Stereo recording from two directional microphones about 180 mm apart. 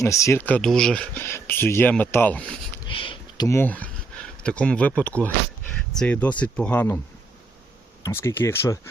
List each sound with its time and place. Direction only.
0.0 s speech: 15° left (ahead or behind)
2.8 s speech: 30° left (ahead or behind); by 7.0 s 10° left (ahead or behind)
8.0 s speech: 15° left (ahead or behind)